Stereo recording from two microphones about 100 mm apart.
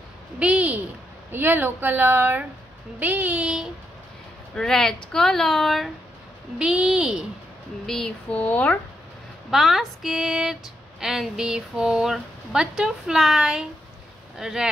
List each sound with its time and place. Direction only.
0.4 s a sound: 15° right (ahead or behind)
1.3 s a woman's voice: 20° right (ahead or behind)
4.6 s speech: 5° left (ahead or behind)
6.6 s speech: 5° right (ahead or behind)
7.8 s speech: 5° left (ahead or behind)
9.5 s speech: centre (ahead or behind)